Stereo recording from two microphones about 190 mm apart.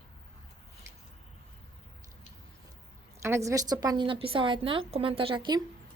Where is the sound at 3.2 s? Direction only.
15° right (ahead or behind).